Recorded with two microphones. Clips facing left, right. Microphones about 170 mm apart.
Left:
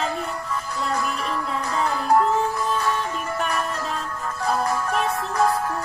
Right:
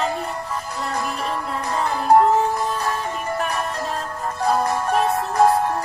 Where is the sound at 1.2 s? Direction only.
35° right (ahead or behind).